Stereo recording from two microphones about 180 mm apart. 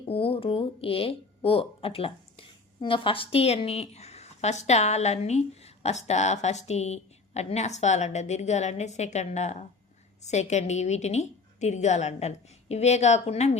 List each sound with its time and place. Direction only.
0.0 s speech: 30° left (ahead or behind)